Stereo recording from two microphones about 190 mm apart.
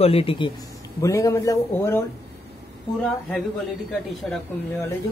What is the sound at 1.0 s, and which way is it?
Speech, 15° left (ahead or behind).